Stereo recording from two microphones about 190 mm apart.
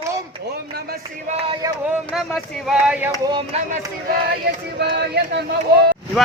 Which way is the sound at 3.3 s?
25° right (ahead or behind).